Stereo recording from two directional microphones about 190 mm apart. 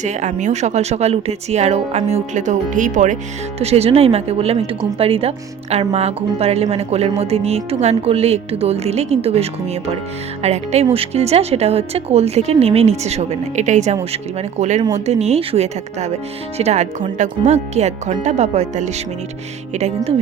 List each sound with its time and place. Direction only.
0.0 s a woman's voice: 40° right (ahead or behind)